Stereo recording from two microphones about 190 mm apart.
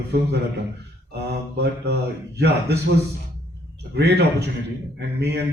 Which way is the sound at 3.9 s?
60° right (ahead or behind).